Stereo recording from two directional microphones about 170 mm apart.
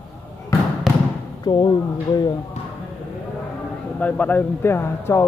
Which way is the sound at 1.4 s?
25° left (ahead or behind).